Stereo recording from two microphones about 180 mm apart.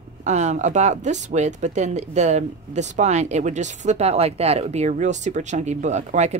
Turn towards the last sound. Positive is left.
turn(degrees=-40)  # may be behind; listen again after turning